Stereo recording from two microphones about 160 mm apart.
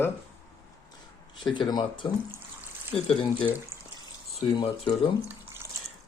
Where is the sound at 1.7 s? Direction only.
30° left (ahead or behind).